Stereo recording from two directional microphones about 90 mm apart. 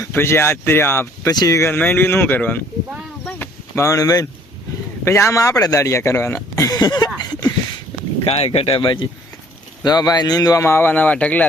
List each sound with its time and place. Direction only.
0.1 s speech: 25° left (ahead or behind)
1.3 s a man's voice: 40° left (ahead or behind)
1.6 s speech: 25° left (ahead or behind)
3.2 s a sound: 20° left (ahead or behind)
3.8 s speech: 35° left (ahead or behind)
5.0 s speech: 30° left (ahead or behind)
6.7 s a man's voice: 45° left (ahead or behind)
7.2 s a sound: 45° left (ahead or behind)
8.2 s speech: 90° left; by 9.0 s 70° left (ahead or behind)
9.8 s a man's voice: 50° left (ahead or behind)
10.6 s speech: 30° left (ahead or behind)